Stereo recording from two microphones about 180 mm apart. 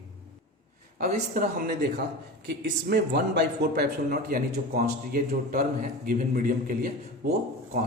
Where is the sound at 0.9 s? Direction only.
45° right (ahead or behind).